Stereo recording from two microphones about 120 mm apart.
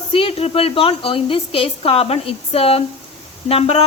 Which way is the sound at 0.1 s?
50° left (ahead or behind).